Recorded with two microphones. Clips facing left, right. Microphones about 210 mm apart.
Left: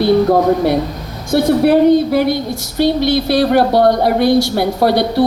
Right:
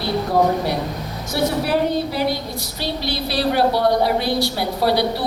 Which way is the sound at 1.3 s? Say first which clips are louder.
Left 9 dB; 55° left (ahead or behind).